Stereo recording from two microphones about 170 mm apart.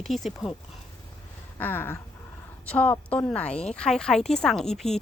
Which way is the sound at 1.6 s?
10° left (ahead or behind).